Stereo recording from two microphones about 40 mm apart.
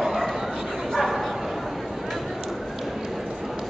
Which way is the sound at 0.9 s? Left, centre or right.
Centre.